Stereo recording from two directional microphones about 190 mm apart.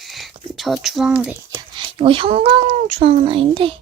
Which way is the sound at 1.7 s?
25° right (ahead or behind).